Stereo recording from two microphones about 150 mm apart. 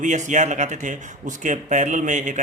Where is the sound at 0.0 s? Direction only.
55° right (ahead or behind).